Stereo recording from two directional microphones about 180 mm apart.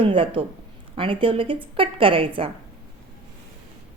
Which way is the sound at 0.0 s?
30° right (ahead or behind).